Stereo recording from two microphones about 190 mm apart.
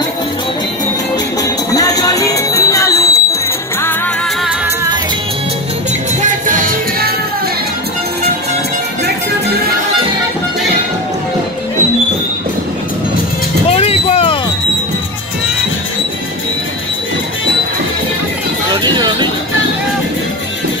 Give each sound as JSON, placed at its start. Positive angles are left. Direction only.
{"t": 1.7, "sound": "music", "side_deg": 20}
{"t": 6.4, "sound": "music", "side_deg": -45}
{"t": 13.7, "sound": "vehicle", "side_deg": 35}
{"t": 18.7, "sound": "music", "side_deg": -20}